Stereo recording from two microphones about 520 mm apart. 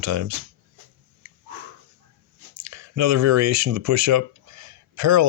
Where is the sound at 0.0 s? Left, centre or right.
Right.